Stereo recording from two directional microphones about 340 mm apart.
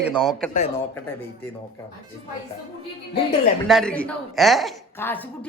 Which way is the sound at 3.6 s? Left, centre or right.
Centre.